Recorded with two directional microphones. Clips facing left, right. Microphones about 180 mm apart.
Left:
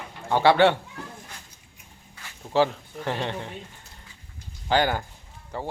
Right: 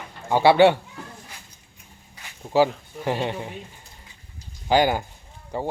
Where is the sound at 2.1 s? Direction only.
15° right (ahead or behind).